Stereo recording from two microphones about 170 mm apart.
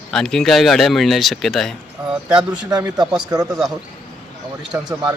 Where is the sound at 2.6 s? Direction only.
25° right (ahead or behind).